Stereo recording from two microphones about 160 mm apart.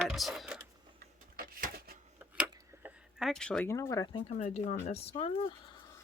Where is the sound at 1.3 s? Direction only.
65° right (ahead or behind).